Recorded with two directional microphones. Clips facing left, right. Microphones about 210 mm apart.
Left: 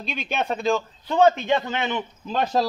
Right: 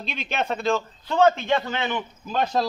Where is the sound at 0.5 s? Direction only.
15° left (ahead or behind).